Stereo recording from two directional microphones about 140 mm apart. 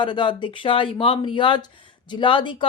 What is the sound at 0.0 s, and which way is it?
Speech, 35° left (ahead or behind).